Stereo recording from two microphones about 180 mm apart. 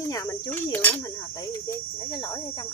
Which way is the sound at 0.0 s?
20° left (ahead or behind).